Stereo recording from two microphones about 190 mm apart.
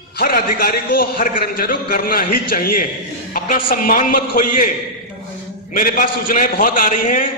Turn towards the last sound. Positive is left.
turn(degrees=45)  # may be behind; listen again after turning